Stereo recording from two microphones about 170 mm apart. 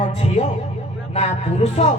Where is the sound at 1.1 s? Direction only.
40° left (ahead or behind).